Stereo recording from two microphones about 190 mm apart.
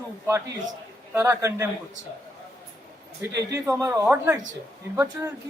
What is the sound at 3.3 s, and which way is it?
Speech, 15° right (ahead or behind).